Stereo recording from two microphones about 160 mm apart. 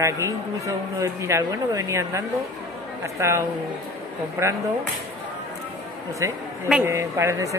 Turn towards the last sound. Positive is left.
turn(degrees=-20)  # may be behind; listen again after turning